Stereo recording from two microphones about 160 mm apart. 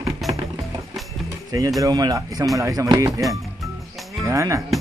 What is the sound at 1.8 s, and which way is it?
Speech, 25° right (ahead or behind).